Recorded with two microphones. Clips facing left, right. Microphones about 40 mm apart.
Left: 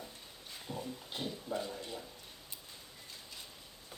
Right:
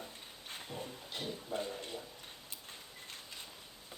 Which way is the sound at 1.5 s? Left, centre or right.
Left.